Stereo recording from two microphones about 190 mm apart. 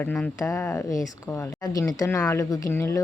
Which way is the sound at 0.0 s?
5° left (ahead or behind).